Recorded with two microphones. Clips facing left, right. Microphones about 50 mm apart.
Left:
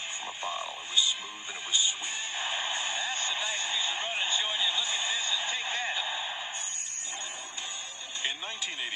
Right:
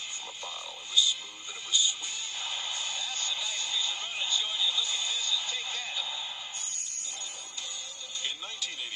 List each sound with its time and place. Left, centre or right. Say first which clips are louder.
0.4 s radio: left 6 dB; left
1.7 s speech: even; left